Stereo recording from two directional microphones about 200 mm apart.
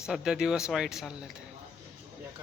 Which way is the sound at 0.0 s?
5° right (ahead or behind).